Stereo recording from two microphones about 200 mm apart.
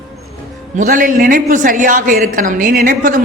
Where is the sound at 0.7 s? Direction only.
40° right (ahead or behind).